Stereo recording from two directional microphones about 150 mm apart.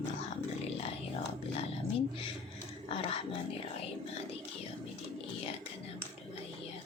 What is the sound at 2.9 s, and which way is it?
Speech, 40° left (ahead or behind).